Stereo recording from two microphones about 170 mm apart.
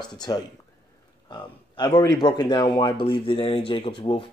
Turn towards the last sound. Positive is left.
turn(degrees=30)  # may be behind; listen again after turning